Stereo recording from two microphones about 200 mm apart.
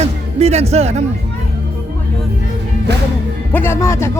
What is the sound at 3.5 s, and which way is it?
Speech, 10° left (ahead or behind).